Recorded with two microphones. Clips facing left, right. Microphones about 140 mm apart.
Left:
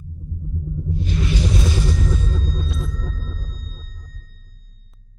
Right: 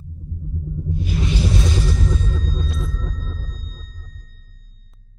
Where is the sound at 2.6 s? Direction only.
Centre (ahead or behind).